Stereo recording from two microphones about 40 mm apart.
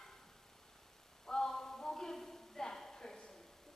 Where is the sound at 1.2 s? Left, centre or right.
Centre.